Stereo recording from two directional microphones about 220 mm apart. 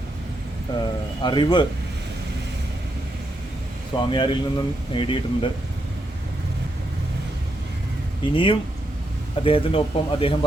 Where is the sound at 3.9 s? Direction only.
20° left (ahead or behind).